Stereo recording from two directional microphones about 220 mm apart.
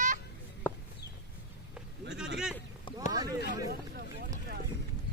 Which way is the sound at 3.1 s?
15° right (ahead or behind).